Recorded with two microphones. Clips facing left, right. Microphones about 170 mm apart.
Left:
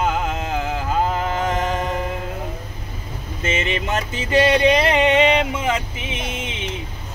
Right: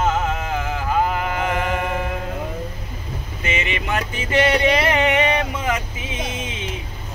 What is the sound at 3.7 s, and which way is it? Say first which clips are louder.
Music: left 1 dB; 25° left (ahead or behind).